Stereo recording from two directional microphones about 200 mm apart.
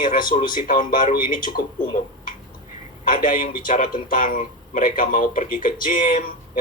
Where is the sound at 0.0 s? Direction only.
45° left (ahead or behind).